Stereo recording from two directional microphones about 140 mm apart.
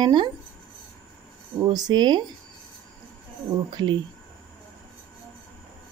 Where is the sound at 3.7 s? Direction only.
35° right (ahead or behind).